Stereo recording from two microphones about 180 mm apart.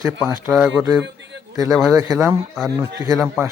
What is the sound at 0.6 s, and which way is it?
A man's voice, 20° right (ahead or behind).